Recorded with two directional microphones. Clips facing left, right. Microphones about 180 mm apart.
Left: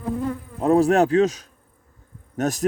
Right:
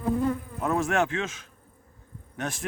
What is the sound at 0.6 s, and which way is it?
A man's voice, 35° left (ahead or behind).